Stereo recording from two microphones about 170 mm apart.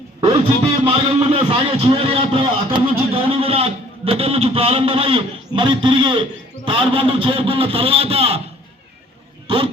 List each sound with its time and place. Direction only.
0.2 s music: 30° right (ahead or behind)
0.9 s a man's voice: 30° right (ahead or behind)
9.5 s a man's voice: 35° right (ahead or behind)